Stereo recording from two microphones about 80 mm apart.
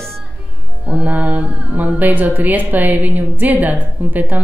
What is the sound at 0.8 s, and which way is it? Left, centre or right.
Speech, centre.